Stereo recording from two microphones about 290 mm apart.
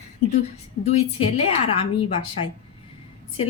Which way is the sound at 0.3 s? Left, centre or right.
Left.